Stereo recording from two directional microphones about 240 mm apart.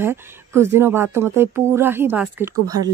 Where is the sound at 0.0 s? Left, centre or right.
Centre.